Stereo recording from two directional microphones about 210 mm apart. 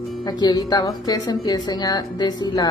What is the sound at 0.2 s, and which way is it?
Speech, 20° left (ahead or behind).